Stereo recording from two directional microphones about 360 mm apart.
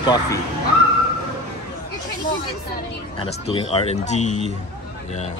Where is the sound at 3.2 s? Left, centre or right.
Centre.